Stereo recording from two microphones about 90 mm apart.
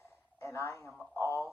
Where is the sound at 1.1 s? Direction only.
30° left (ahead or behind).